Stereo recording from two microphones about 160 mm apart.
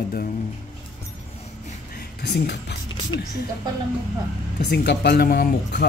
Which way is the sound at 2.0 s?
90° left.